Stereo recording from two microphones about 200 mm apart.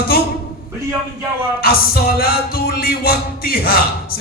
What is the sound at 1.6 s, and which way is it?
Music, 50° left (ahead or behind).